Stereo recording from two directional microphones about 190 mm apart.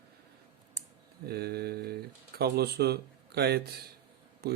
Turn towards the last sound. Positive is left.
turn(degrees=-55)  # may be behind; listen again after turning